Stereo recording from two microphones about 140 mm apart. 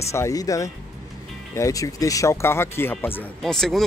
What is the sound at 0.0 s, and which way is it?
Speech, 20° left (ahead or behind).